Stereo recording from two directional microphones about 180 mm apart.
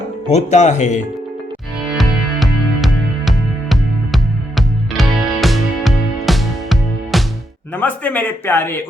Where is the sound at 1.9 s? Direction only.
Centre (ahead or behind).